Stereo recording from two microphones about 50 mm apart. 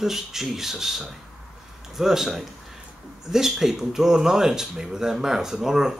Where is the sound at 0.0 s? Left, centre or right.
Centre.